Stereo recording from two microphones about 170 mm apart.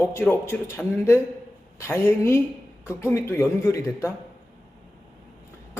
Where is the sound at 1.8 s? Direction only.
15° left (ahead or behind).